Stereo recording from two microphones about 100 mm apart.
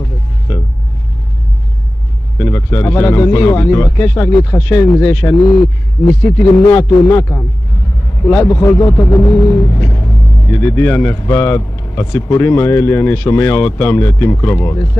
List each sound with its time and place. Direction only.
2.3 s speech: 25° left (ahead or behind)
11.2 s speech: 35° left (ahead or behind)